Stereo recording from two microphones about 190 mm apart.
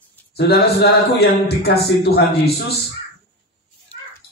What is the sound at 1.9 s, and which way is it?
Speech, 60° left (ahead or behind).